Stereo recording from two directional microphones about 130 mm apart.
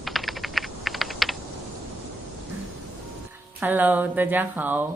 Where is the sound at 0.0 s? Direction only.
Centre (ahead or behind).